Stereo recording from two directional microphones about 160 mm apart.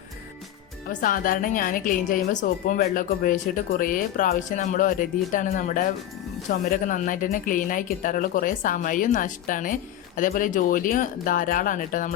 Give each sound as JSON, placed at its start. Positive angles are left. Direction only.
{"t": 0.9, "sound": "a woman's voice", "side_deg": 60}